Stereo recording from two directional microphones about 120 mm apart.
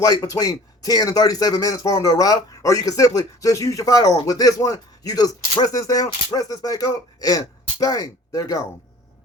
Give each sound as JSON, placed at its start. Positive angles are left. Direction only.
{"t": 0.0, "sound": "speech", "side_deg": 30}